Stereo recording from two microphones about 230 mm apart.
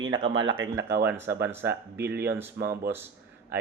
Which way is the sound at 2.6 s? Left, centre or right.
Right.